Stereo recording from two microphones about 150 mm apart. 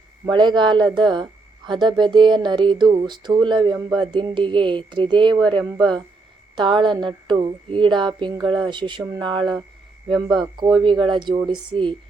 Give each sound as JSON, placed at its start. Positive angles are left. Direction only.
{"t": 0.3, "sound": "a woman's voice", "side_deg": -30}
{"t": 6.6, "sound": "a woman's voice", "side_deg": -30}